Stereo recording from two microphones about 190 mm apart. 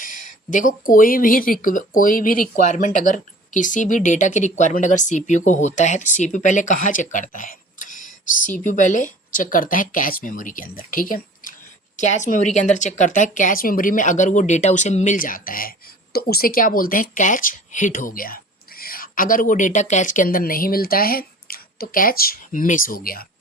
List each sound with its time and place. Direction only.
0.0 s speech: 45° left (ahead or behind)